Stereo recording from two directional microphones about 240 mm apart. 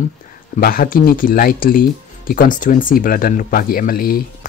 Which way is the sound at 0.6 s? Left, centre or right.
Left.